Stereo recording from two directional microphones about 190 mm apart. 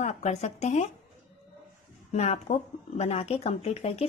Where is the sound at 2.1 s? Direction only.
35° left (ahead or behind).